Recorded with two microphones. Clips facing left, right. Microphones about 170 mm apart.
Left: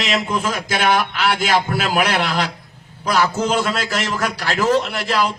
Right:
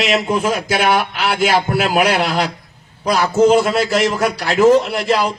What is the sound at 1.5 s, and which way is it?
A man's voice, 45° right (ahead or behind).